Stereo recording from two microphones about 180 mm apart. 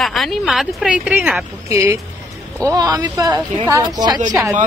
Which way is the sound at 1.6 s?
15° right (ahead or behind).